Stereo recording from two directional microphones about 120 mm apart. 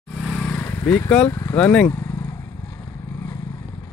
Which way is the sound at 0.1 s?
Centre (ahead or behind).